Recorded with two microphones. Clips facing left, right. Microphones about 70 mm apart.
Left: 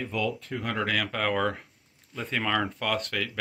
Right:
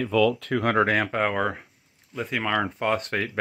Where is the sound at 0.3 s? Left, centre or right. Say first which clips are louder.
Right 8 dB; right.